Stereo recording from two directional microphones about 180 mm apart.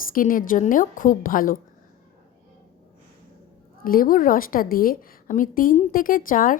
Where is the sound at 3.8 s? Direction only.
50° left (ahead or behind).